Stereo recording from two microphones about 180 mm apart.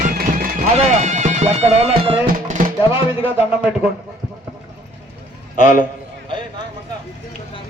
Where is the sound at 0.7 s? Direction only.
40° right (ahead or behind).